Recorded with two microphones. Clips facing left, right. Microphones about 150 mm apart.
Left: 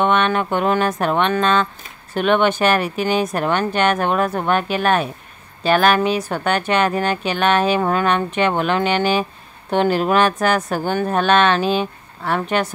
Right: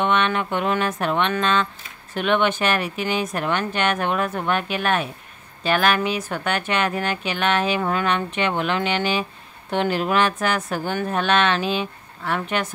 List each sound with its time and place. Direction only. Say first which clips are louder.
0.0 s speech: left 4 dB; 45° left (ahead or behind)